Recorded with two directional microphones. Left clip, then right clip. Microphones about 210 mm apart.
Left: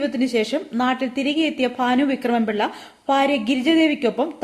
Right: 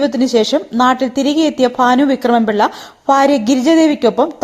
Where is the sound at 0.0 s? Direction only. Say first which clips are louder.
Right 8 dB; 25° right (ahead or behind).